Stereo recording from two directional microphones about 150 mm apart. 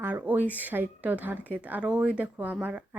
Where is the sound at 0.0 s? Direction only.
10° right (ahead or behind).